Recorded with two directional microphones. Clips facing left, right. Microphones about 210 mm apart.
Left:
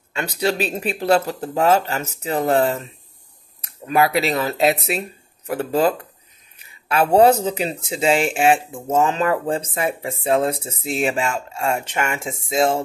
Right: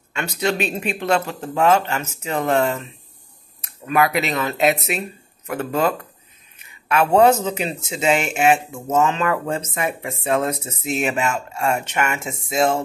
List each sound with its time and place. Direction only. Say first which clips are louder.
0.1 s speech: left 1 dB; 35° left (ahead or behind)